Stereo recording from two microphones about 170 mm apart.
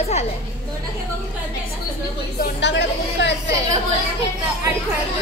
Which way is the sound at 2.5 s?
90° left.